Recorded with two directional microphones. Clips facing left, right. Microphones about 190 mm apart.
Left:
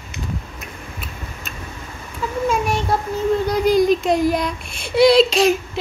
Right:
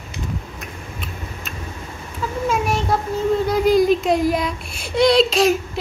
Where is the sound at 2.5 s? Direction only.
Centre (ahead or behind).